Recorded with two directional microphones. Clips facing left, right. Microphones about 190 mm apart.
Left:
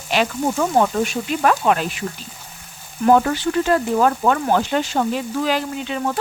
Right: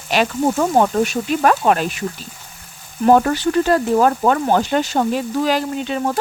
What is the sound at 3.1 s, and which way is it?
Frying, 40° right (ahead or behind).